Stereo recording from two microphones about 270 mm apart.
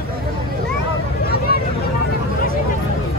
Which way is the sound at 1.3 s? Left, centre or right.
Left.